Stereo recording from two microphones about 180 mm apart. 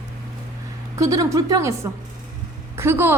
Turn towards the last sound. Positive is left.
turn(degrees=-10)  # may be behind; listen again after turning